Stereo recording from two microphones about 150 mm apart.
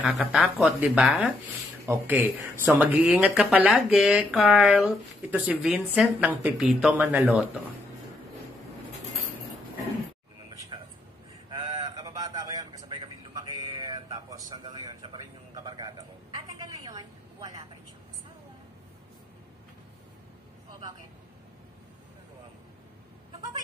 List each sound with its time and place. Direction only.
0.0 s speech: 5° right (ahead or behind)
11.6 s vehicle: 25° right (ahead or behind)
14.5 s a sound: 30° right (ahead or behind)